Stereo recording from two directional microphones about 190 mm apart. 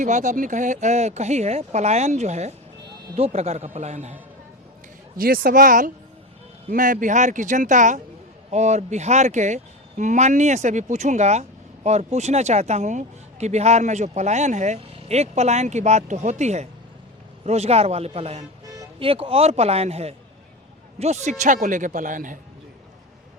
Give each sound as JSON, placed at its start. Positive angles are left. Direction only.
{"t": 0.0, "sound": "speech", "side_deg": -40}
{"t": 5.1, "sound": "speech", "side_deg": -50}